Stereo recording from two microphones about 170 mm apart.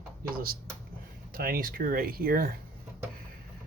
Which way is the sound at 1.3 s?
60° right (ahead or behind).